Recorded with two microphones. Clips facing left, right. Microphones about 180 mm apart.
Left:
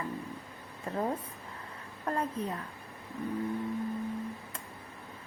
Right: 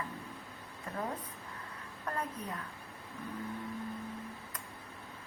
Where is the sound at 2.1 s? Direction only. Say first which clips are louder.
Left 6 dB; 25° left (ahead or behind).